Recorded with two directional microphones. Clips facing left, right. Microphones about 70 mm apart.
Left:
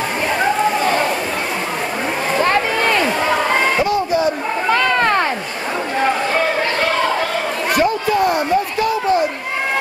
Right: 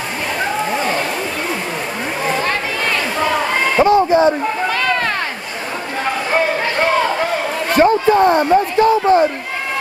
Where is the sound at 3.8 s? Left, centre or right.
Right.